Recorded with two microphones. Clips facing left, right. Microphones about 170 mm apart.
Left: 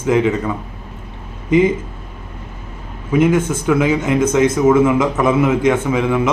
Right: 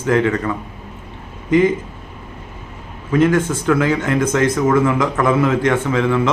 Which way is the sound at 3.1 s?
15° left (ahead or behind).